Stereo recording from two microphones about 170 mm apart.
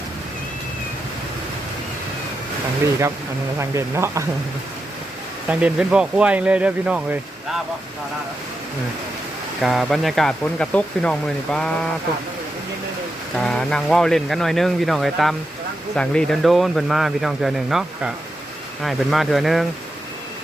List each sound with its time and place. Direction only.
2.8 s speech: 15° right (ahead or behind)
5.5 s speech: 5° right (ahead or behind)
9.6 s speech: centre (ahead or behind)
13.3 s speech: 5° left (ahead or behind)